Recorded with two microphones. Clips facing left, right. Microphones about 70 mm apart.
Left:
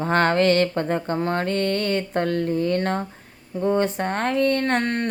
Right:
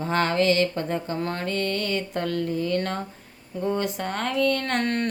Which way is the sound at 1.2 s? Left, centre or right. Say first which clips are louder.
Left 4 dB; left.